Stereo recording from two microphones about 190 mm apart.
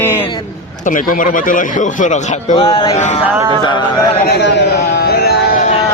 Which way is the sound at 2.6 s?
20° left (ahead or behind).